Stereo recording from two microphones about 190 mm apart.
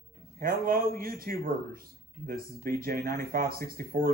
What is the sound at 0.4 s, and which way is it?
Speech, 50° right (ahead or behind).